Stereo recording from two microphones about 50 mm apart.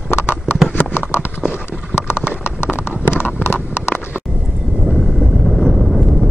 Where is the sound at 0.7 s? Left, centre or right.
Left.